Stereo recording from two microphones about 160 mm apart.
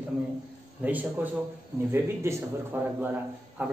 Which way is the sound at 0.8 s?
10° right (ahead or behind).